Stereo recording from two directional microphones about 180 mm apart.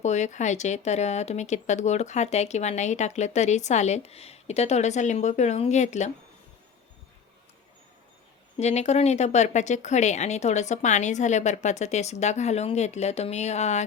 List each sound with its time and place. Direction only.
0.0 s speech: 40° left (ahead or behind)
8.5 s speech: 40° left (ahead or behind)